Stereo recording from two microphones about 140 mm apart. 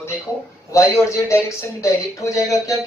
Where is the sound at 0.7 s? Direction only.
20° left (ahead or behind).